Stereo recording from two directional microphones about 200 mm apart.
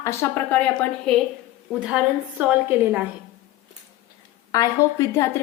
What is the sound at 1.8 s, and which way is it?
A woman's voice, 5° right (ahead or behind).